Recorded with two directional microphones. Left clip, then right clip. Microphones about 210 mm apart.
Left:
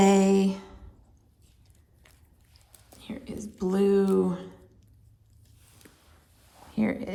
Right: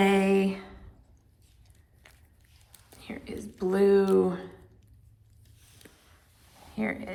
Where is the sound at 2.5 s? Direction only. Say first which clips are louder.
Left 1 dB; 30° left (ahead or behind).